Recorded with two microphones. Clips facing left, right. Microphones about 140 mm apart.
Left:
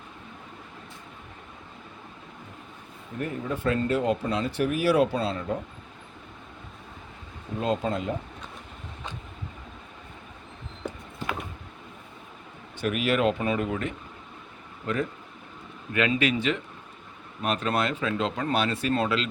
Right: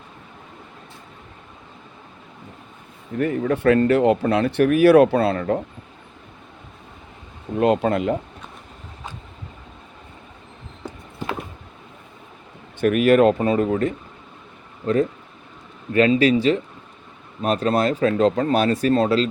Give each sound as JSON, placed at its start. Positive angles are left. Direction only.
{"t": 3.2, "sound": "speech", "side_deg": -70}
{"t": 7.6, "sound": "speech", "side_deg": -70}
{"t": 12.8, "sound": "speech", "side_deg": -50}
{"t": 15.9, "sound": "speech", "side_deg": -35}